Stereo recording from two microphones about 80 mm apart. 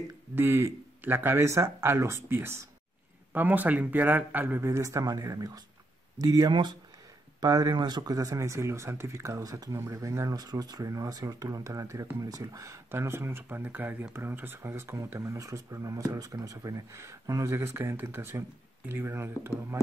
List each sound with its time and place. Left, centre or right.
0.4 s speech: right
4.6 s speech: right
5.0 s speech: right
6.5 s speech: right
7.3 s speech: right